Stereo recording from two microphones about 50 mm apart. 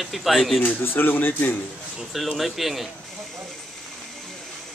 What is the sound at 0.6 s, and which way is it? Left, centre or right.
Speech, left.